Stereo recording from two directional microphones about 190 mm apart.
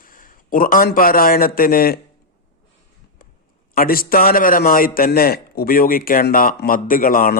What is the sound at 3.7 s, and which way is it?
A man's voice, 50° left (ahead or behind).